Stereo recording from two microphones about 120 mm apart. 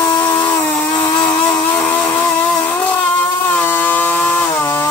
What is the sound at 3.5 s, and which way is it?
Chainsaw, 15° left (ahead or behind).